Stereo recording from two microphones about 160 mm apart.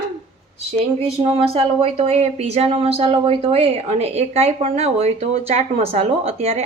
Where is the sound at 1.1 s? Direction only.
35° right (ahead or behind).